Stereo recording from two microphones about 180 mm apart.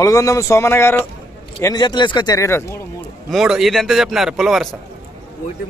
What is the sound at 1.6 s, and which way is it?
Speech, 25° left (ahead or behind).